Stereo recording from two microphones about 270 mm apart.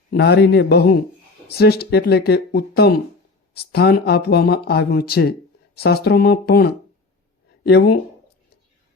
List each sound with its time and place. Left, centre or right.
0.1 s speech: left